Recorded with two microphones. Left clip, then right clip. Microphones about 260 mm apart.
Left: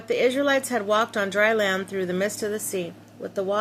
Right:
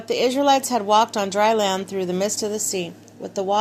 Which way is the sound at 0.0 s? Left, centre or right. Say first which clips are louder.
Right 1 dB; centre.